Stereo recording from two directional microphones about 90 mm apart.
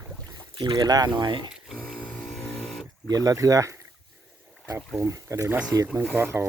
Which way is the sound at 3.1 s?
45° right (ahead or behind).